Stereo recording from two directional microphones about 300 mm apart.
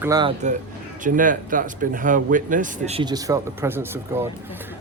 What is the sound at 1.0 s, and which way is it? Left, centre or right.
Speech, right.